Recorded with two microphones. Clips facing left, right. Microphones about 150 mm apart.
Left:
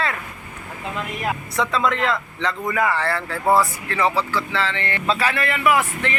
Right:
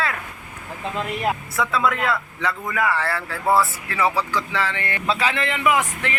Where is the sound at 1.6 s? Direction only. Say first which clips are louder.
Left 2 dB; 5° right (ahead or behind).